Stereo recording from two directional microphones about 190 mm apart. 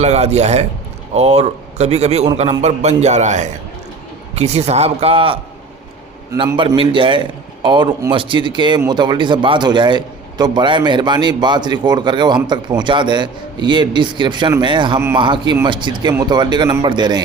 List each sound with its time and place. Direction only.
0.0 s a man's voice: 35° right (ahead or behind)